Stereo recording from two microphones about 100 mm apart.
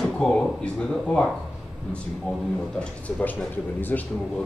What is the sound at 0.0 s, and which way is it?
Speech, 5° left (ahead or behind).